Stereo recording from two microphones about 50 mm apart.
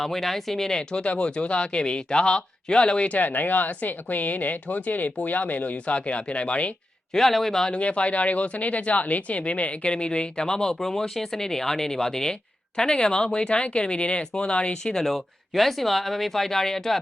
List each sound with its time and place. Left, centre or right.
0.0 s speech: centre; by 6.7 s left
7.1 s speech: centre
7.7 s speech: left
14.9 s speech: centre